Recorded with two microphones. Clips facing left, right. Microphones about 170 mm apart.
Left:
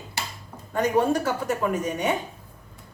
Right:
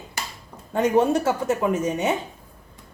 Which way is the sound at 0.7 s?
25° right (ahead or behind).